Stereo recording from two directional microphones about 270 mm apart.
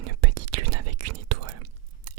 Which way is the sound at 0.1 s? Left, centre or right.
Right.